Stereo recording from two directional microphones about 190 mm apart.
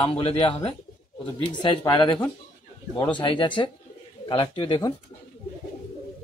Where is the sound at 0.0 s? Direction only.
30° left (ahead or behind).